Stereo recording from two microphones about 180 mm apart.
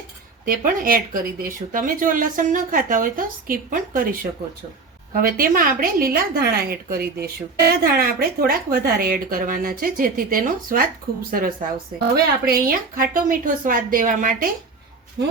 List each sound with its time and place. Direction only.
0.4 s a woman's voice: 50° right (ahead or behind)